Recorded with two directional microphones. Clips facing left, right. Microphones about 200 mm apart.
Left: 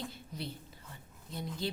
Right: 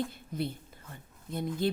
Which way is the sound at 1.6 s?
55° right (ahead or behind).